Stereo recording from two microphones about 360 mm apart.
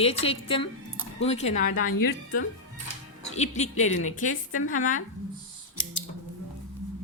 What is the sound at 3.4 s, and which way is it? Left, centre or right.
Speech, centre.